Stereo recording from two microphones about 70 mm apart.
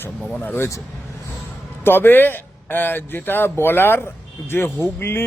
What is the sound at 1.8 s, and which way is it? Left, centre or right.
A man's voice, left.